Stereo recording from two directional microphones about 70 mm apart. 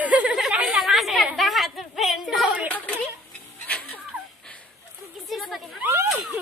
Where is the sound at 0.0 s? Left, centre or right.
Right.